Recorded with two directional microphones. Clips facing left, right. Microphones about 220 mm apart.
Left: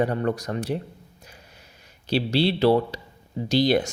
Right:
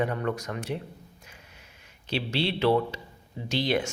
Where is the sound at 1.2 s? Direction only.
35° left (ahead or behind).